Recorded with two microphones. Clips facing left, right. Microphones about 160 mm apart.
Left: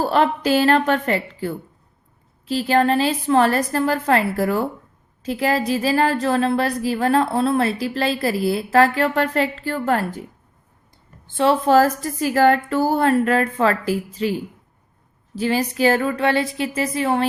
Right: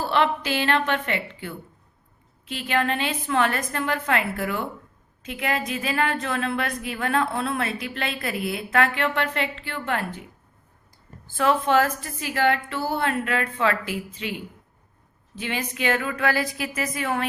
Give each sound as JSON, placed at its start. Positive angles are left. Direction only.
{"t": 0.0, "sound": "speech", "side_deg": 40}
{"t": 11.3, "sound": "speech", "side_deg": 35}